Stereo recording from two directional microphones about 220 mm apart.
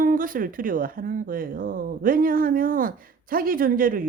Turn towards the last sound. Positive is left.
turn(degrees=-40)  # may be behind; listen again after turning